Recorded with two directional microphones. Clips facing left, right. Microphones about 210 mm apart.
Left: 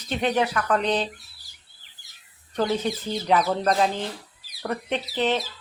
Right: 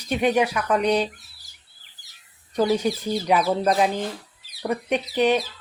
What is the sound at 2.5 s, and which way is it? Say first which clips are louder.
Speech: right 3 dB; 10° right (ahead or behind).